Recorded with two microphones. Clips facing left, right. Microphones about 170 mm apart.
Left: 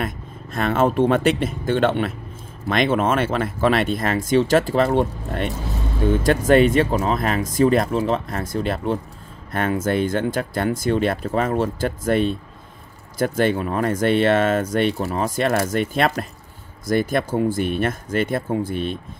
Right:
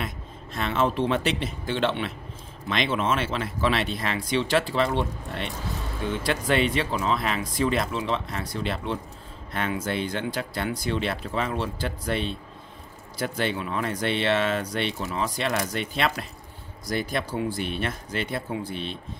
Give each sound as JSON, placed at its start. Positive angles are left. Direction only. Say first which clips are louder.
{"t": 0.0, "sound": "speech", "louder": "left 6 dB", "side_deg": 50}